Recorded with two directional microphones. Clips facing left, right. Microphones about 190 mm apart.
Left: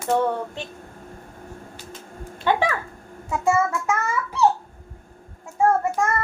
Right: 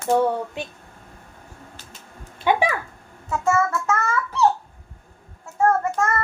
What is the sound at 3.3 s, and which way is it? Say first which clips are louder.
Child singing: even; 15° left (ahead or behind).